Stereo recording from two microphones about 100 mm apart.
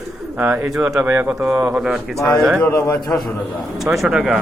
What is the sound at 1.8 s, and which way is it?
Speech, 5° right (ahead or behind).